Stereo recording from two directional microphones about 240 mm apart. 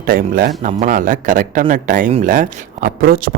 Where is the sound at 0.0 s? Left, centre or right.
Right.